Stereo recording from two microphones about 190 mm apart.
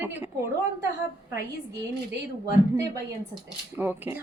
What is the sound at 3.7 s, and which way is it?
Speech, 10° right (ahead or behind).